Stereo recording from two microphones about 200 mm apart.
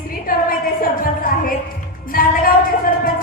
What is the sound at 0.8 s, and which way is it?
A woman's voice, 45° left (ahead or behind).